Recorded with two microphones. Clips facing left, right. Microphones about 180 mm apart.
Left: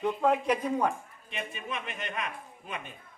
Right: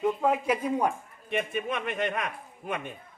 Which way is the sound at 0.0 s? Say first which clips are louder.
Right 1 dB; 5° right (ahead or behind).